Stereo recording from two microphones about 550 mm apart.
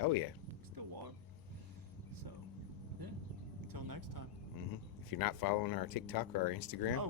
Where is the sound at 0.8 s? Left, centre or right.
Right.